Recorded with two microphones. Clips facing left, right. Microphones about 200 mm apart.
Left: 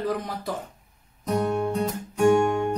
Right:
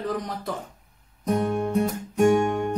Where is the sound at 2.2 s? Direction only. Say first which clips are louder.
Even; 15° right (ahead or behind).